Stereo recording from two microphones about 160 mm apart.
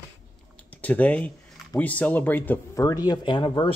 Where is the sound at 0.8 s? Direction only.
10° left (ahead or behind).